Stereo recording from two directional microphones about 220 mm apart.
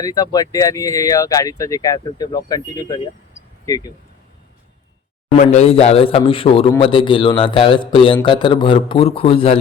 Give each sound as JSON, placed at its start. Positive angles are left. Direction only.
{"t": 0.0, "sound": "speech", "side_deg": 15}
{"t": 5.4, "sound": "a man's voice", "side_deg": 30}